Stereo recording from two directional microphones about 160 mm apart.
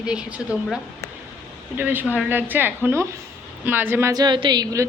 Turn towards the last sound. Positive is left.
turn(degrees=-25)  # may be behind; listen again after turning